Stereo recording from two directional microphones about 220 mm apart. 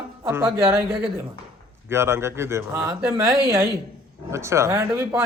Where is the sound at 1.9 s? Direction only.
10° right (ahead or behind).